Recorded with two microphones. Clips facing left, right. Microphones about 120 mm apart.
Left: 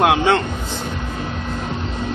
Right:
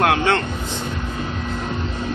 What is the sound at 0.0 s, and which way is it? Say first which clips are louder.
Speech: left 2 dB; 15° left (ahead or behind).